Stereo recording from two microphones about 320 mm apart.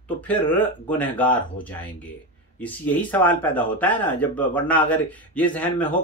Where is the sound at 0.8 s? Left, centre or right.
Centre.